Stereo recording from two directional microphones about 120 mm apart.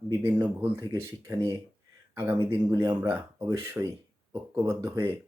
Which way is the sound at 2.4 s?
30° right (ahead or behind).